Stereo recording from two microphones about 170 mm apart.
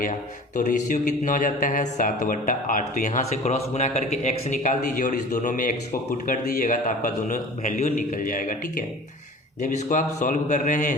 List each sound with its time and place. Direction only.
0.0 s speech: 50° left (ahead or behind)